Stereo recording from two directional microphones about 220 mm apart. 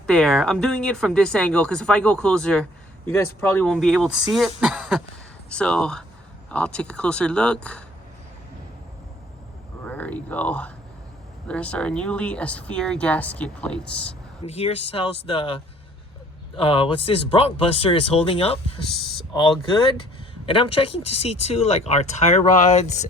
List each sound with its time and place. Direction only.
0.1 s speech: centre (ahead or behind)
9.8 s speech: 5° left (ahead or behind)
14.4 s speech: 25° left (ahead or behind)
20.4 s speech: 25° left (ahead or behind)